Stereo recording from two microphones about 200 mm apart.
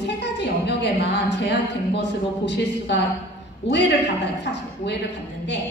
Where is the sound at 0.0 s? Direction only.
60° left (ahead or behind).